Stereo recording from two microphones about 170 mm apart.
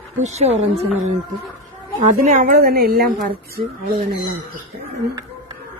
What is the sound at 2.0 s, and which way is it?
A woman's voice, 45° right (ahead or behind).